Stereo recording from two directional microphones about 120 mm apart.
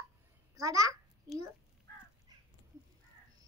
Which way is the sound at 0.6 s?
30° right (ahead or behind).